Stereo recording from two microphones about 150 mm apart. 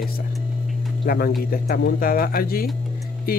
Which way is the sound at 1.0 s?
90° left.